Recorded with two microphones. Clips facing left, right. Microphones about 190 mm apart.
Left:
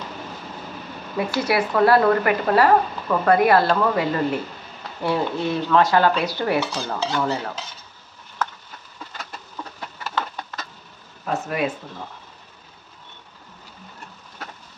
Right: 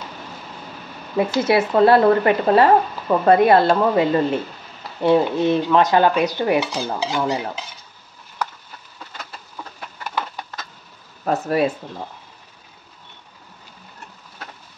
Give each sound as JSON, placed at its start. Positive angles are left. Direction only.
{"t": 1.1, "sound": "speech", "side_deg": -25}
{"t": 10.0, "sound": "a sound", "side_deg": -15}
{"t": 11.2, "sound": "speech", "side_deg": -35}